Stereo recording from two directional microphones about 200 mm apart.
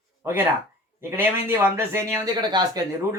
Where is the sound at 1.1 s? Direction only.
10° right (ahead or behind).